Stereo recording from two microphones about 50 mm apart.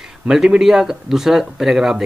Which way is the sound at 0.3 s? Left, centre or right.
Centre.